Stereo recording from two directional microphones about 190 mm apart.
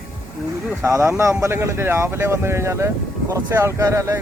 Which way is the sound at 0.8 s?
15° right (ahead or behind).